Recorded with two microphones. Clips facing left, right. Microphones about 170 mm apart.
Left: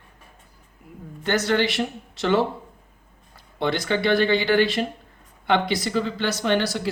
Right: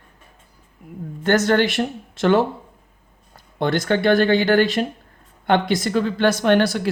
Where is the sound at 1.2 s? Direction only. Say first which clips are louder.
Right 5 dB; 50° right (ahead or behind).